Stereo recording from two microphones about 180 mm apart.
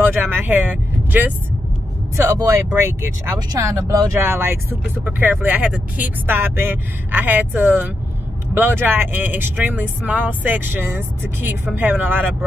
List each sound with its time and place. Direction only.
0.0 s speech: 10° right (ahead or behind)